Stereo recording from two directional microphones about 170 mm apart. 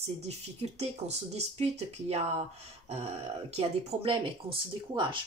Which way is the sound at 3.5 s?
35° right (ahead or behind).